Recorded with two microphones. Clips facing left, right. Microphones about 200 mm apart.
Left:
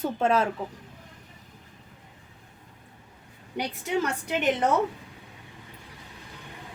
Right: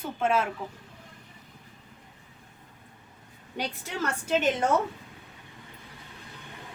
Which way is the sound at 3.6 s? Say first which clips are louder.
Left 5 dB; 15° left (ahead or behind).